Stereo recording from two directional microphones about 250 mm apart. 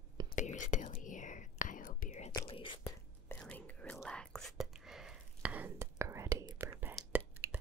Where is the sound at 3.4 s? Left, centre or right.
Centre.